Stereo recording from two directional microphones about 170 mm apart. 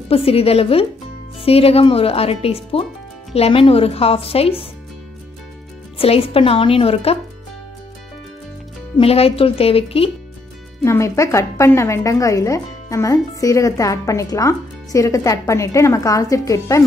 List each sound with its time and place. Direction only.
0.1 s a woman's voice: 35° left (ahead or behind)
5.9 s a woman's voice: 35° left (ahead or behind)
8.9 s a woman's voice: 35° left (ahead or behind)
10.8 s a woman's voice: 15° left (ahead or behind)